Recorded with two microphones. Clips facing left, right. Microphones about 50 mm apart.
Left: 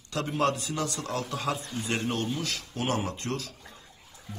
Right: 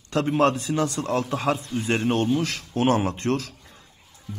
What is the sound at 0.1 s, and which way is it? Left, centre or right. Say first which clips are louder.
A man's voice: right 7 dB; right.